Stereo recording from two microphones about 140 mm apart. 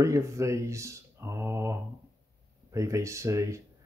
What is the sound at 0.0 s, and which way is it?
Speech, 20° right (ahead or behind).